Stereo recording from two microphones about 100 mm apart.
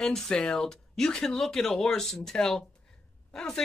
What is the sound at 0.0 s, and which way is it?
Speech, 5° left (ahead or behind).